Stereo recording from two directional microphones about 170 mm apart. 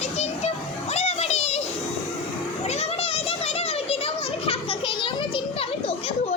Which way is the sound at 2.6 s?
40° left (ahead or behind).